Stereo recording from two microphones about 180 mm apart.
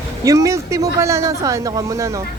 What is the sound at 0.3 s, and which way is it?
Speech, 15° right (ahead or behind).